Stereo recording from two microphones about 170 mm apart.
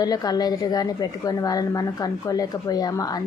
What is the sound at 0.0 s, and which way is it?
A woman's voice, 25° left (ahead or behind).